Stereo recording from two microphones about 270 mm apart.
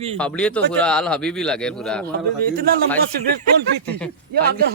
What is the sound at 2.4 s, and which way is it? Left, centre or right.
Speech, right.